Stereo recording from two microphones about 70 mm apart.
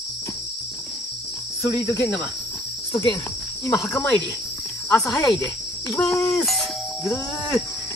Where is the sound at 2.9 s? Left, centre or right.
Left.